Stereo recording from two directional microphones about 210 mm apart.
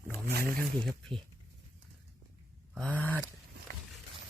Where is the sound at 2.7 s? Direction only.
5° left (ahead or behind).